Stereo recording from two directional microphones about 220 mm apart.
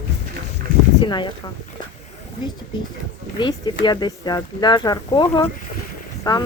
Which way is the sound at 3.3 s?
20° left (ahead or behind).